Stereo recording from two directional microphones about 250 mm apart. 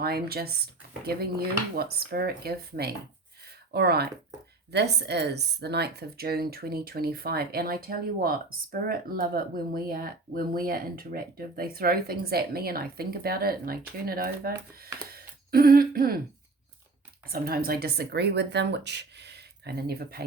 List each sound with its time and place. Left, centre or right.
0.0 s speech: right
15.1 s a sound: right
17.2 s speech: right